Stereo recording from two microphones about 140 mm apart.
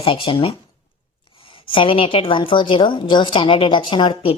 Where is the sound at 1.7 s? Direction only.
40° left (ahead or behind).